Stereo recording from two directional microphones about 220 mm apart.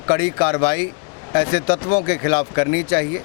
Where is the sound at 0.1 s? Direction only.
20° left (ahead or behind).